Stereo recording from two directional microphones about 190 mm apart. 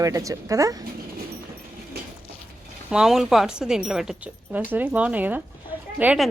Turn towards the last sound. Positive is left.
turn(degrees=-5)  # may be behind; listen again after turning